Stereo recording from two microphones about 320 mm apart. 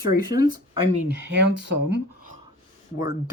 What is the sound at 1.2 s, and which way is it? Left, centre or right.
Speech, right.